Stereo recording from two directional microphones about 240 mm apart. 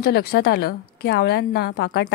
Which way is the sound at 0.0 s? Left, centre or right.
Left.